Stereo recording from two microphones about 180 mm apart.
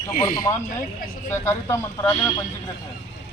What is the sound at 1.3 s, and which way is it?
Speech, 15° left (ahead or behind).